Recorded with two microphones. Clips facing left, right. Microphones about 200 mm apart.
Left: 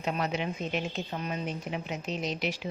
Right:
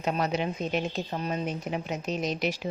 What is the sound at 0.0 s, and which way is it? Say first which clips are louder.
A woman's voice: right 3 dB; 40° right (ahead or behind).